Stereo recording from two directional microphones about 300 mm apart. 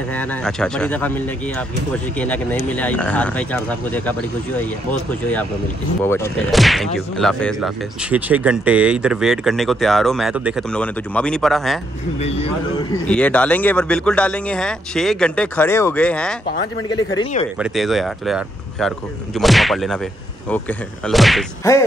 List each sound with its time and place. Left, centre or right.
0.1 s speech: centre
5.2 s speech: centre
12.2 s speech: left; by 16.3 s centre
16.9 s speech: centre
17.6 s speech: centre